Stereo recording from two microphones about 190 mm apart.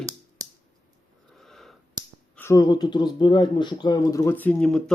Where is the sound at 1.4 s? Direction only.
Centre (ahead or behind).